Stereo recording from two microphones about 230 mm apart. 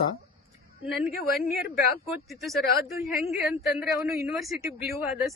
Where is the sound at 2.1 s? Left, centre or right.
Centre.